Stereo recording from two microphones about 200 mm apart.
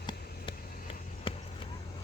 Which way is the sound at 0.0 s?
25° left (ahead or behind).